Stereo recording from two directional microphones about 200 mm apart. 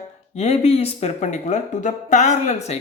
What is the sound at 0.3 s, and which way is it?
Speech, 35° left (ahead or behind).